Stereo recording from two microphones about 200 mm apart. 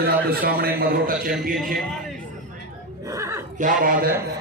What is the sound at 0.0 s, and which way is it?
A man's voice, 50° right (ahead or behind).